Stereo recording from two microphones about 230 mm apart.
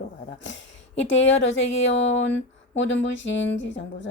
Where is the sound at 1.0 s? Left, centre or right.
Left.